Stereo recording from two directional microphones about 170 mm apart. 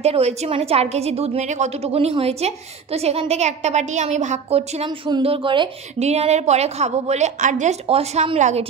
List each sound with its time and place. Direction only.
0.0 s a woman's voice: 40° right (ahead or behind)
5.9 s a woman's voice: 40° right (ahead or behind)